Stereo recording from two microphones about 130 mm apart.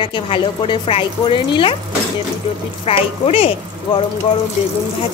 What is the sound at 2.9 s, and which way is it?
Speech, 50° left (ahead or behind).